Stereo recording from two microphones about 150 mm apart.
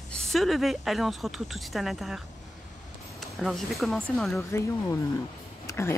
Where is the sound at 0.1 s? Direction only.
Centre (ahead or behind).